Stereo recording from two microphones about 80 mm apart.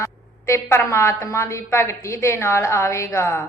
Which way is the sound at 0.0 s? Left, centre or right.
Left.